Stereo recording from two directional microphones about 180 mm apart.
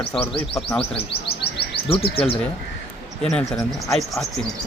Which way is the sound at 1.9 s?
30° left (ahead or behind).